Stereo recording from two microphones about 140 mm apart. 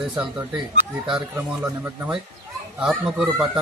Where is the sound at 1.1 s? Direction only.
10° right (ahead or behind).